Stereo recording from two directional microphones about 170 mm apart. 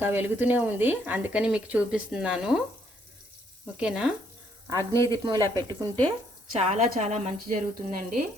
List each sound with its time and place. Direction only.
0.0 s speech: 10° right (ahead or behind)
3.8 s speech: 5° right (ahead or behind)
4.8 s speech: 20° left (ahead or behind)
5.1 s speech: 25° right (ahead or behind)
6.6 s a woman's voice: 40° right (ahead or behind)